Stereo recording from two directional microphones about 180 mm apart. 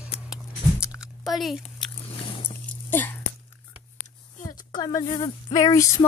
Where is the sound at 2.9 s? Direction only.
10° left (ahead or behind).